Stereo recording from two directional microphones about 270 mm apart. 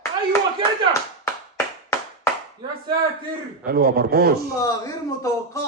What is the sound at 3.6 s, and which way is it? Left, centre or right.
Speech, right.